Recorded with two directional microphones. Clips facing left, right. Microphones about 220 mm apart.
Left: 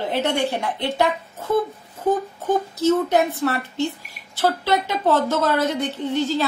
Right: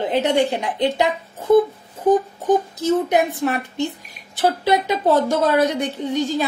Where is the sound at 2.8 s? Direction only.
15° right (ahead or behind).